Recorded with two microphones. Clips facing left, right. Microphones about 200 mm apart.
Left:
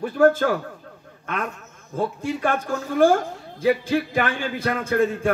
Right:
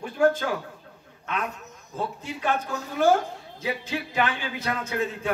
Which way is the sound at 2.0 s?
50° left (ahead or behind).